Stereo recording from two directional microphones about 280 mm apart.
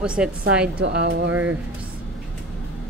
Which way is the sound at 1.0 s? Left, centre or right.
Right.